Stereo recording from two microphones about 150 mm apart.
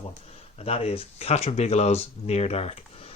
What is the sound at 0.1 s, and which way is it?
Speech, 45° left (ahead or behind).